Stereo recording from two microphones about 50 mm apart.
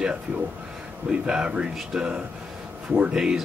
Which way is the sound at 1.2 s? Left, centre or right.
Centre.